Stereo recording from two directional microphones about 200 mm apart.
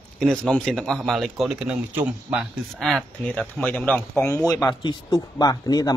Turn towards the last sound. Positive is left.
turn(degrees=20)  # may be behind; listen again after turning